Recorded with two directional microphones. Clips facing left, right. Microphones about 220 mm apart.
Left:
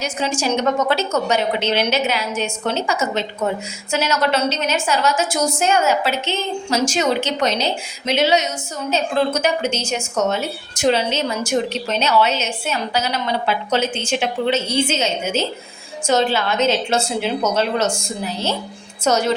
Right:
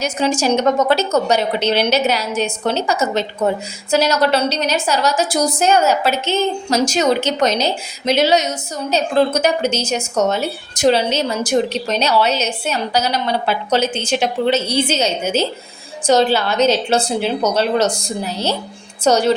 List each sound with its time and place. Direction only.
0.0 s a woman's voice: 40° right (ahead or behind)